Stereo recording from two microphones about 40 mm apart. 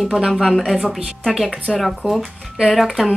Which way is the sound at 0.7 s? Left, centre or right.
Centre.